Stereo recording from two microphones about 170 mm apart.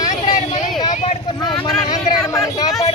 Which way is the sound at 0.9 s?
40° left (ahead or behind).